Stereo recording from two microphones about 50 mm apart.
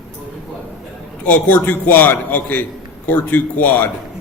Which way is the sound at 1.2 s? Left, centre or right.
Left.